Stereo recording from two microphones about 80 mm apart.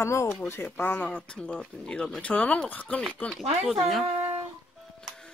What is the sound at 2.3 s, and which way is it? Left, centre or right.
Speech, centre.